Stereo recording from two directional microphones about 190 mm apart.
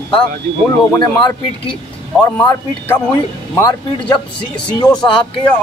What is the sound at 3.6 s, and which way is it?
Speech, 25° left (ahead or behind).